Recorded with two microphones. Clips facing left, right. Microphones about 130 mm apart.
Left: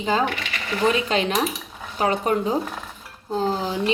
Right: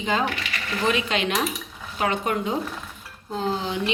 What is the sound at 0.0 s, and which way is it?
Speech, 35° left (ahead or behind).